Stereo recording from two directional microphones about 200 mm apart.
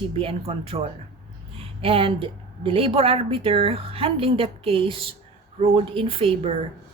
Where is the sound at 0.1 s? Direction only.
30° right (ahead or behind).